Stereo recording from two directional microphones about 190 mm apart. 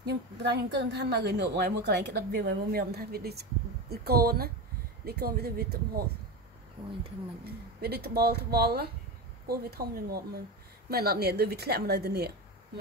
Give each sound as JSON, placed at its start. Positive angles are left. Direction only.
{"t": 0.0, "sound": "a woman's voice", "side_deg": -60}
{"t": 7.4, "sound": "a woman's voice", "side_deg": -55}